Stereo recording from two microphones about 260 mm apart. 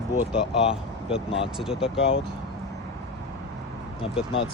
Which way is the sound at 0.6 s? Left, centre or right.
Left.